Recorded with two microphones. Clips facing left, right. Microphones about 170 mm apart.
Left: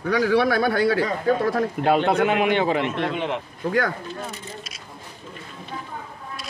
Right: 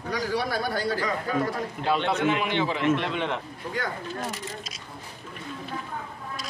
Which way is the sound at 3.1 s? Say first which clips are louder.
Left 3 dB; 5° left (ahead or behind).